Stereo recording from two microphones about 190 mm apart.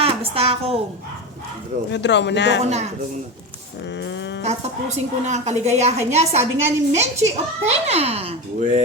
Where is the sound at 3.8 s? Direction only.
65° left (ahead or behind).